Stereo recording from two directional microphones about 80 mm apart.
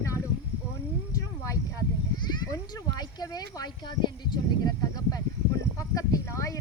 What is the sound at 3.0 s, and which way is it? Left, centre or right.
Speech, left.